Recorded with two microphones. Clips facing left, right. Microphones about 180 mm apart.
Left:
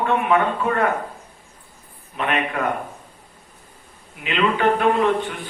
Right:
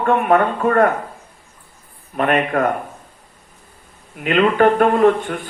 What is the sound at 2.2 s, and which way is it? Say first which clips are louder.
Speech: right 6 dB; 50° right (ahead or behind).